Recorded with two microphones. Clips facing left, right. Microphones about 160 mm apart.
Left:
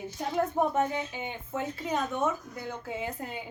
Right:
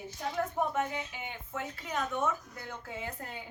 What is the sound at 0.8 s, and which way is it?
Speech, 30° left (ahead or behind).